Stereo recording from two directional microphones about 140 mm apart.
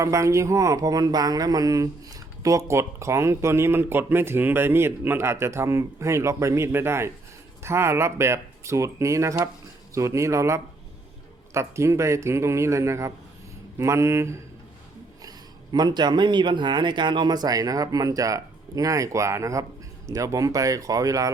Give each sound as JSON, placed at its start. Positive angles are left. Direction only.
{"t": 0.0, "sound": "speech", "side_deg": -20}